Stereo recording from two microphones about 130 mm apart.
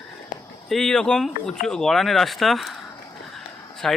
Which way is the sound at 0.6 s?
5° left (ahead or behind).